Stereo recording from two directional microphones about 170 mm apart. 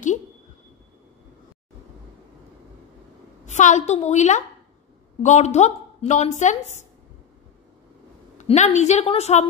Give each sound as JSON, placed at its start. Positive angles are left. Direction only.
{"t": 3.4, "sound": "a woman's voice", "side_deg": 45}
{"t": 8.4, "sound": "a woman's voice", "side_deg": 40}